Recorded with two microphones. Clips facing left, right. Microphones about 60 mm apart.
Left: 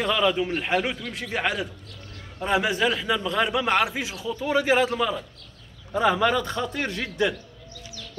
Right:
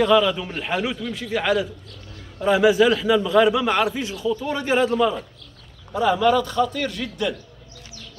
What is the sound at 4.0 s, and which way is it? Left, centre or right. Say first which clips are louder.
Speech: right 5 dB; centre.